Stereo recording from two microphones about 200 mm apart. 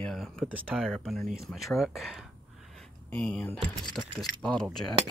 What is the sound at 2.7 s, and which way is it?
Power windows, 5° left (ahead or behind).